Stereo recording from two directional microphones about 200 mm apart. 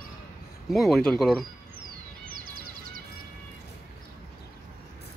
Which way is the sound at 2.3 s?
45° right (ahead or behind).